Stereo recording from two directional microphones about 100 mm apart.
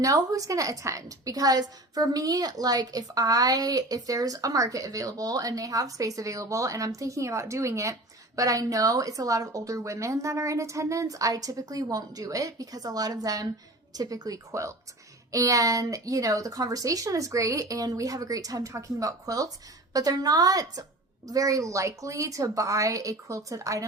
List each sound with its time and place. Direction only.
0.0 s a woman's voice: 35° right (ahead or behind)